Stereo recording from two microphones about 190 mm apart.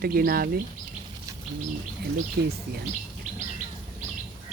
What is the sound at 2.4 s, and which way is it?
Speech, 55° right (ahead or behind).